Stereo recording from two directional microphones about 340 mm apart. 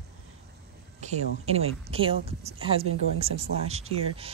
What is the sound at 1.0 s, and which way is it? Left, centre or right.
Speech, centre.